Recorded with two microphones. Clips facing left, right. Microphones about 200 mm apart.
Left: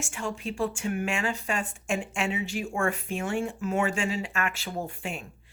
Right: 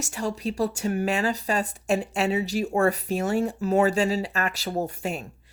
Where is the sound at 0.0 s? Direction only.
40° right (ahead or behind).